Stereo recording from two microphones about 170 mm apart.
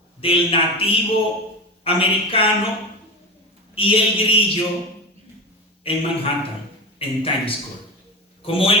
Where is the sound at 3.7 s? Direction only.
30° left (ahead or behind).